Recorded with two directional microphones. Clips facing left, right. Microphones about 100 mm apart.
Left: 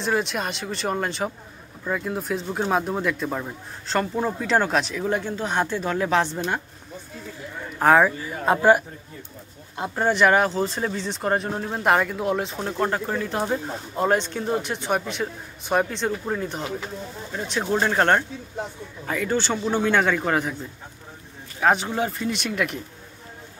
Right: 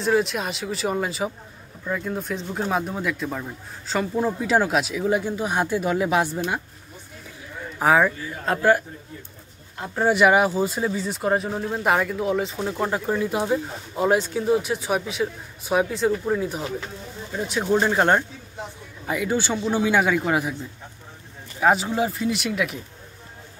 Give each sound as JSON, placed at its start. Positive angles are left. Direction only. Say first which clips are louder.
{"t": 0.0, "sound": "speech", "louder": "right 3 dB", "side_deg": 0}
{"t": 7.8, "sound": "speech", "louder": "left 2 dB", "side_deg": 0}
{"t": 8.5, "sound": "a man's voice", "louder": "left 2 dB", "side_deg": 15}
{"t": 9.9, "sound": "speech", "louder": "right 1 dB", "side_deg": -5}
{"t": 21.5, "sound": "speech", "louder": "right 1 dB", "side_deg": -5}